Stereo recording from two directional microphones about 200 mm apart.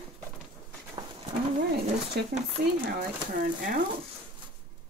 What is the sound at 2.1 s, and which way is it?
Speech, 55° right (ahead or behind).